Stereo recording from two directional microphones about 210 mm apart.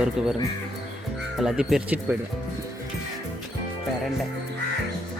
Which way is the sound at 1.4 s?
Centre (ahead or behind).